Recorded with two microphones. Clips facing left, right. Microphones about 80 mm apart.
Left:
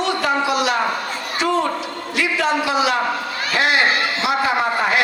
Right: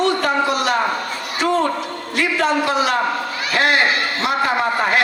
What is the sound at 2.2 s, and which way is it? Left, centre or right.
A man's voice, right.